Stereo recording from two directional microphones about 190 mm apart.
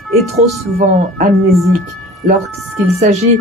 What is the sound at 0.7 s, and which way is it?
Speech, 40° right (ahead or behind).